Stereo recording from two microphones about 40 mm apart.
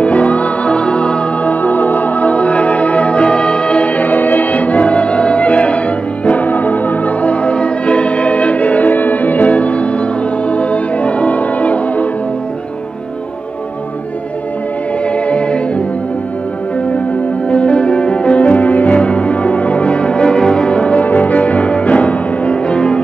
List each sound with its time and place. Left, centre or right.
0.0 s music: left
1.4 s music: left
15.1 s music: left
17.5 s music: left
20.7 s music: left